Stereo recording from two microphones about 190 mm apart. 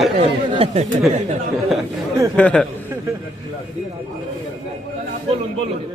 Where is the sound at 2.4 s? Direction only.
5° left (ahead or behind).